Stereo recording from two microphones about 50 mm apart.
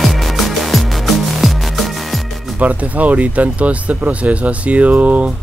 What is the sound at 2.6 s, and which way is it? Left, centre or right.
Speech, right.